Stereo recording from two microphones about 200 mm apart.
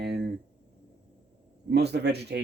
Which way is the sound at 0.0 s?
55° right (ahead or behind).